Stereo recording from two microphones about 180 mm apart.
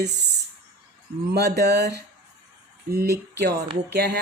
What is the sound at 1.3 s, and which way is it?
A woman's voice, 60° right (ahead or behind).